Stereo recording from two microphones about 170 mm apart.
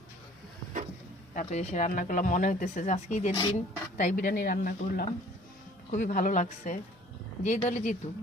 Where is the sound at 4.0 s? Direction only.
50° left (ahead or behind).